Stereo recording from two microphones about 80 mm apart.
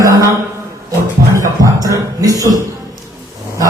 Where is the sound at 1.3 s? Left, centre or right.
Right.